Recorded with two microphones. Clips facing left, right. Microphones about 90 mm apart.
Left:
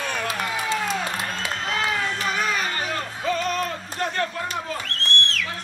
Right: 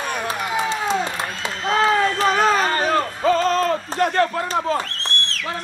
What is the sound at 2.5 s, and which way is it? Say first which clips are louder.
Music: right 8 dB; 35° right (ahead or behind).